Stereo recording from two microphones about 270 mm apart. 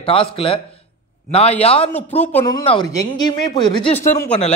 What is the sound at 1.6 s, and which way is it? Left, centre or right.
Speech, left.